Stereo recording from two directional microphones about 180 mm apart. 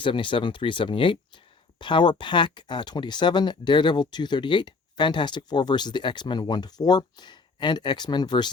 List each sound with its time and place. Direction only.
0.0 s speech: 30° left (ahead or behind)